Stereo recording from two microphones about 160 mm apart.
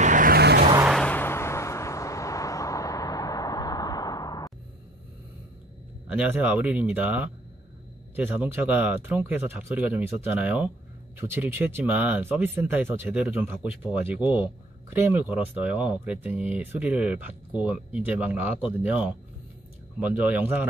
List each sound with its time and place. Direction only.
0.0 s vehicle: 55° right (ahead or behind); by 0.7 s 80° right
0.8 s vehicle: 5° left (ahead or behind); by 4.5 s 25° left (ahead or behind)
6.0 s speech: 10° right (ahead or behind)